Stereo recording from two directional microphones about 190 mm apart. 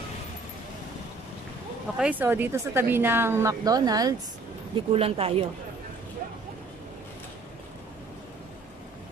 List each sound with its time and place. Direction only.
2.0 s speech: 10° right (ahead or behind)
4.7 s speech: 30° right (ahead or behind)